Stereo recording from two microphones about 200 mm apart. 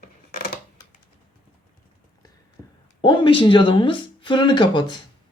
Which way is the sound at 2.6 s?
15° left (ahead or behind).